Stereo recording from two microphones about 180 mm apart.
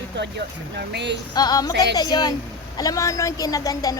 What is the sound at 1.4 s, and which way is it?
A woman's voice, 20° left (ahead or behind).